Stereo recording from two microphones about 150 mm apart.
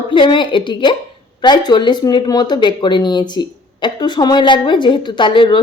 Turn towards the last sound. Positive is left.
turn(degrees=35)  # may be behind; listen again after turning